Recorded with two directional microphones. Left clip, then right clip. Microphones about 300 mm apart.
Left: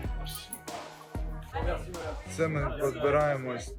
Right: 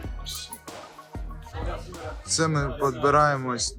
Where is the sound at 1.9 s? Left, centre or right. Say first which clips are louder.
Right 7 dB; centre.